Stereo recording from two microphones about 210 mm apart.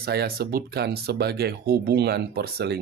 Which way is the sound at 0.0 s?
50° right (ahead or behind).